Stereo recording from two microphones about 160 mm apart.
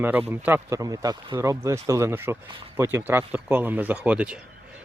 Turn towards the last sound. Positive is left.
turn(degrees=-10)  # may be behind; listen again after turning